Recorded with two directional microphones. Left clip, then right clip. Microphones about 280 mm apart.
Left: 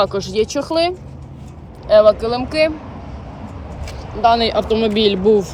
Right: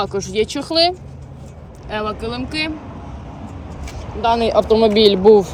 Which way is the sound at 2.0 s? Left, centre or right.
Centre.